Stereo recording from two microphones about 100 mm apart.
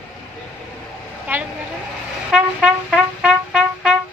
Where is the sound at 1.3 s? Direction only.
20° right (ahead or behind).